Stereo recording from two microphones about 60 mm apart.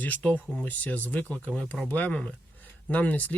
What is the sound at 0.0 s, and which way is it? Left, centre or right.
Speech, left.